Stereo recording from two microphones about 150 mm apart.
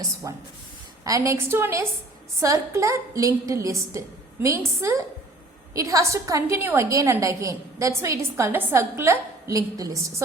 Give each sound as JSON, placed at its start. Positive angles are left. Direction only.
{"t": 0.2, "sound": "a woman's voice", "side_deg": -20}